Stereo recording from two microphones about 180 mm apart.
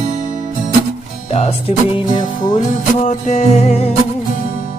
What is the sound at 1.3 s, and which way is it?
Music, 35° left (ahead or behind).